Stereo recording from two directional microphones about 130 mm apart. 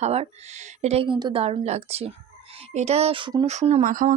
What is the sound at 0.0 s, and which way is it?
Speech, 55° right (ahead or behind).